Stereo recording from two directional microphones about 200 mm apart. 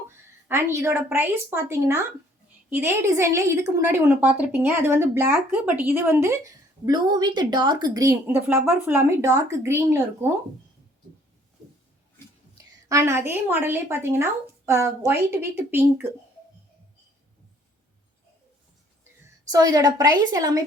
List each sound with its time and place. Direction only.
0.4 s a woman's voice: 10° right (ahead or behind)
12.9 s a woman's voice: 15° right (ahead or behind)
19.5 s a woman's voice: 20° right (ahead or behind)